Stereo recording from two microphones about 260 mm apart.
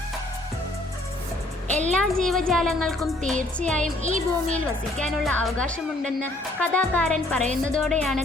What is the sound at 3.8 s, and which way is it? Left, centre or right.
Speech, right.